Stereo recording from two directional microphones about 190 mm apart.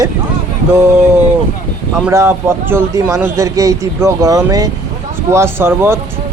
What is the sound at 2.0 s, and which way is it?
Speech, 15° right (ahead or behind).